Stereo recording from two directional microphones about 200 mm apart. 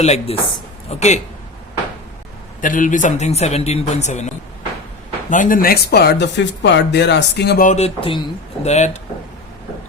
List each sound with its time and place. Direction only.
0.0 s a man's voice: 35° left (ahead or behind)
2.6 s a man's voice: 40° left (ahead or behind)
5.3 s speech: 40° left (ahead or behind)
7.7 s a man's voice: 30° left (ahead or behind)